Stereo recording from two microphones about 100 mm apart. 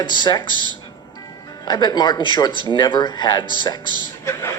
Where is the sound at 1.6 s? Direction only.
45° left (ahead or behind).